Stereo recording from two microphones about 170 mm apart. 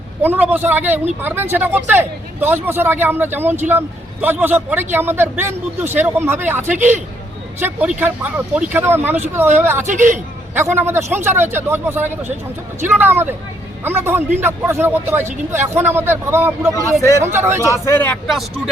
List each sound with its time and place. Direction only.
0.2 s speech: 10° right (ahead or behind)
9.8 s speech: 45° right (ahead or behind)
10.5 s speech: 15° right (ahead or behind)
16.7 s a man's voice: 20° left (ahead or behind)
17.2 s speech: 15° right (ahead or behind)
17.7 s speech: 15° left (ahead or behind)
18.3 s speech: centre (ahead or behind)